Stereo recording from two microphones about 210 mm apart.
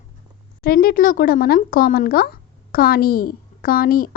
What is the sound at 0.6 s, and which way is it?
A woman's voice, 45° left (ahead or behind).